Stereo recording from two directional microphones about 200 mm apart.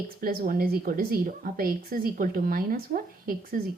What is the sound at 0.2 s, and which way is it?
A woman's voice, 45° right (ahead or behind).